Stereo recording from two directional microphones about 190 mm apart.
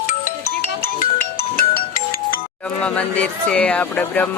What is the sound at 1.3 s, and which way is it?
Music, 50° left (ahead or behind).